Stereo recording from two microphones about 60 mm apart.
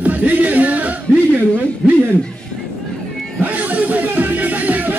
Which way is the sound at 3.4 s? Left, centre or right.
Right.